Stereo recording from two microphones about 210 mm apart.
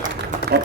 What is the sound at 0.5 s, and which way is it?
Speech, 50° right (ahead or behind).